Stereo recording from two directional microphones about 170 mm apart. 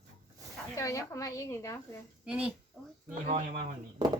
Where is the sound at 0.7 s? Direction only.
20° left (ahead or behind).